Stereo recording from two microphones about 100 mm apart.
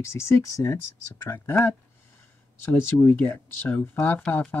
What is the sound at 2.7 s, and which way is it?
Speech, 25° left (ahead or behind).